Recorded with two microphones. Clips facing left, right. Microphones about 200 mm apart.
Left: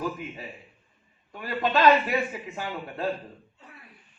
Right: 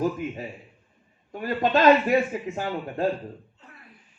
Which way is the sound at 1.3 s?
45° right (ahead or behind).